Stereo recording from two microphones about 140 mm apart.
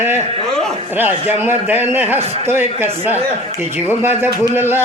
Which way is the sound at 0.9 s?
15° right (ahead or behind).